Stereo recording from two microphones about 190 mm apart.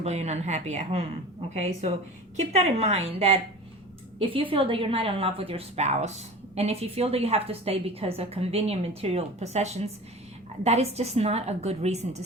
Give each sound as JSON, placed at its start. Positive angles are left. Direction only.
{"t": 0.0, "sound": "a woman's voice", "side_deg": -35}
{"t": 2.3, "sound": "a woman's voice", "side_deg": -35}